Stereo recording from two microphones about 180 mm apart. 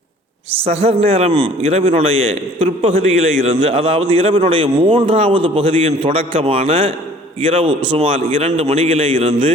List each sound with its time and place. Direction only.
0.6 s a man's voice: 35° right (ahead or behind)